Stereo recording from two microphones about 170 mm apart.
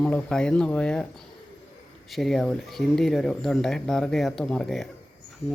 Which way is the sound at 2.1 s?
Centre (ahead or behind).